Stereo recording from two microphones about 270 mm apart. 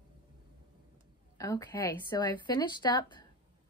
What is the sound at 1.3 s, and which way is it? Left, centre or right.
A woman's voice, centre.